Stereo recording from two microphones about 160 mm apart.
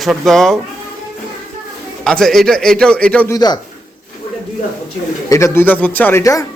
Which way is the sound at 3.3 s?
25° left (ahead or behind).